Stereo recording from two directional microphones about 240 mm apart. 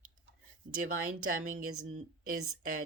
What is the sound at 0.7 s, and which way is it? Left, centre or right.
Speech, right.